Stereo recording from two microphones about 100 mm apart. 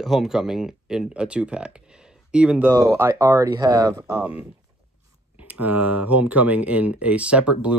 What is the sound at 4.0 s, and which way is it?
Speech, 20° right (ahead or behind).